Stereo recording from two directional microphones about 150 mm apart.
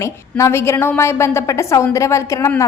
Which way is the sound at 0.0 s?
20° left (ahead or behind).